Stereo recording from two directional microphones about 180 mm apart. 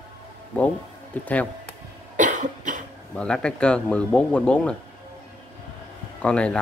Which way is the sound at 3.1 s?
5° left (ahead or behind).